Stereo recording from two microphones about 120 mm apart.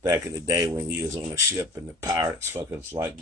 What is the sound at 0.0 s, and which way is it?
Speech, 30° right (ahead or behind).